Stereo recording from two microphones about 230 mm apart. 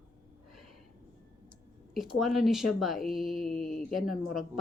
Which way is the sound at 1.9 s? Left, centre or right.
Centre.